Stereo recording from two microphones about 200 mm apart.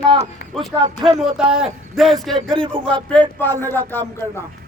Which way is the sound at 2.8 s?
25° right (ahead or behind).